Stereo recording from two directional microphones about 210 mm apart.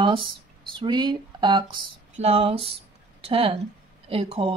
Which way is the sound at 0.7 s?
20° right (ahead or behind).